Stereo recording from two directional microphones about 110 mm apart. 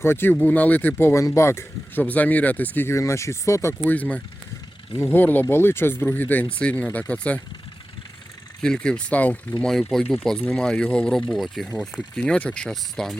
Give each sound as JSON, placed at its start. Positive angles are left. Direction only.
{"t": 0.0, "sound": "speech", "side_deg": 20}
{"t": 3.8, "sound": "speech", "side_deg": 15}
{"t": 8.6, "sound": "speech", "side_deg": 5}
{"t": 9.6, "sound": "speech", "side_deg": 0}